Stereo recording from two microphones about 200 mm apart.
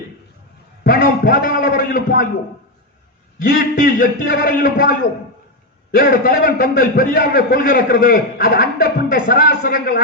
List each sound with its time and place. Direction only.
0.9 s a man's voice: 45° left (ahead or behind)
3.6 s a man's voice: 45° left (ahead or behind)
6.0 s a man's voice: 45° left (ahead or behind)